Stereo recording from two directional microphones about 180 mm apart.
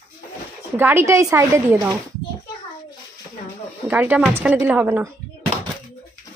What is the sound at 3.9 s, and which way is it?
Speech, 10° right (ahead or behind).